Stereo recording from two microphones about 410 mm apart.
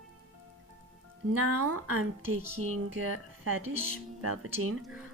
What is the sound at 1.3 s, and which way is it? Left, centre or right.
A woman's voice, right.